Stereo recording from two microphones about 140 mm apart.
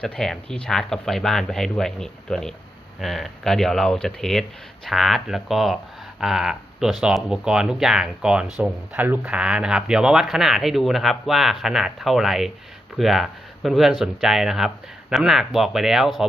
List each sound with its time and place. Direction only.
0.0 s speech: 5° left (ahead or behind)